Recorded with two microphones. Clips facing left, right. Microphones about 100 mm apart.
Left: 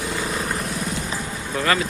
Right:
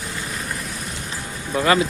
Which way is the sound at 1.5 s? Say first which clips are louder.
Right 4 dB; 20° right (ahead or behind).